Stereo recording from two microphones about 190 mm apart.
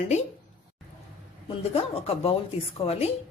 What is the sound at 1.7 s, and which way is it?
Speech, 30° left (ahead or behind).